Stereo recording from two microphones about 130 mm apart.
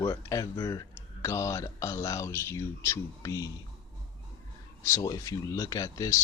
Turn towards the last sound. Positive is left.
turn(degrees=25)  # may be behind; listen again after turning